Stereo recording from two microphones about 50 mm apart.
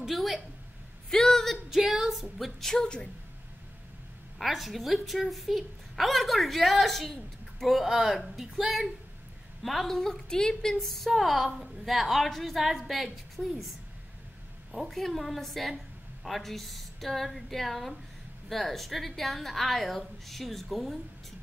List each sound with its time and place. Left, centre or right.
0.0 s a sound: centre
1.1 s a sound: centre
1.7 s a woman's voice: centre
2.7 s a woman's voice: centre
4.4 s a woman's voice: centre
14.7 s a woman's voice: centre